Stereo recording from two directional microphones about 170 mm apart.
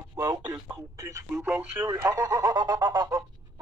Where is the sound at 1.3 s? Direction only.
5° right (ahead or behind).